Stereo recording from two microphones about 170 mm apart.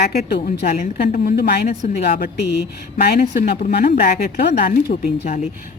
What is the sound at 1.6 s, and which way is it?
A woman's voice, 45° left (ahead or behind).